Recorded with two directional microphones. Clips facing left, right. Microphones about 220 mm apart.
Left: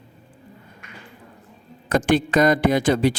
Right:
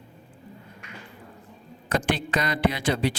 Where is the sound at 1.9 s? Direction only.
45° left (ahead or behind).